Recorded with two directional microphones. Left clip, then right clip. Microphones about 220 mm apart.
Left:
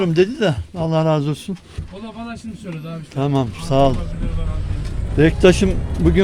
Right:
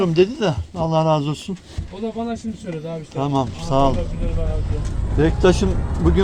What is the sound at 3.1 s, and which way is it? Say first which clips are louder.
Speech: left 1 dB; 40° left (ahead or behind).